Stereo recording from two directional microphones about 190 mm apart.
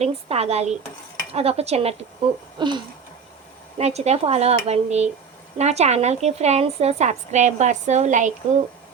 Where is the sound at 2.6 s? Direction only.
25° right (ahead or behind).